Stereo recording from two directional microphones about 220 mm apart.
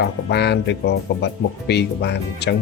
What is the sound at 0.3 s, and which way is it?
Speech, 50° left (ahead or behind).